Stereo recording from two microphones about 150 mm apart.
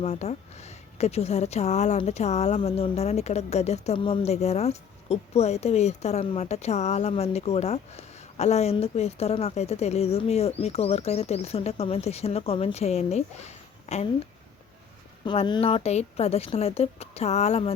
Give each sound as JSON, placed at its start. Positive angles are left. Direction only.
{"t": 0.0, "sound": "a woman's voice", "side_deg": 45}
{"t": 15.2, "sound": "a woman's voice", "side_deg": 30}